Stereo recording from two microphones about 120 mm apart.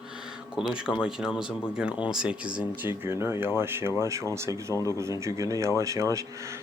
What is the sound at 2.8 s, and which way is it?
Speech, 20° right (ahead or behind).